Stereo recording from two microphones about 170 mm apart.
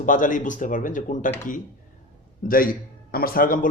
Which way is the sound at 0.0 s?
50° left (ahead or behind).